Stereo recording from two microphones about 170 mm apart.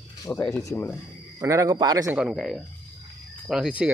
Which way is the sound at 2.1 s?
5° right (ahead or behind).